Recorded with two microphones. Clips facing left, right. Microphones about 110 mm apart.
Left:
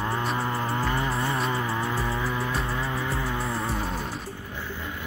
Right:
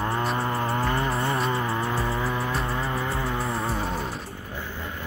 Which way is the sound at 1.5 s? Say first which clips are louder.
Right 1 dB; 25° right (ahead or behind).